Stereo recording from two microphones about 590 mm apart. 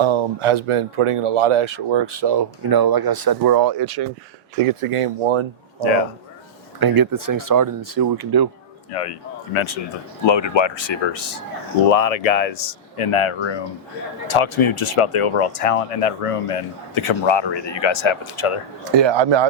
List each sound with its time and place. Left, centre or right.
0.0 s speech: right
4.5 s speech: right
6.7 s speech: right
8.9 s speech: left
11.9 s speech: left
18.9 s speech: right